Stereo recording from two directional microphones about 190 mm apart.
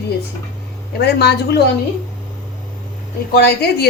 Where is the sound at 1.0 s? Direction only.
60° left (ahead or behind).